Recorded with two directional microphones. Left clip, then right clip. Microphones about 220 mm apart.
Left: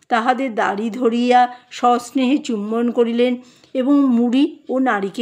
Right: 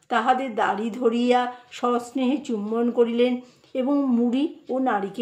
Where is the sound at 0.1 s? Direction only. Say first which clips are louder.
Left 4 dB; 45° left (ahead or behind).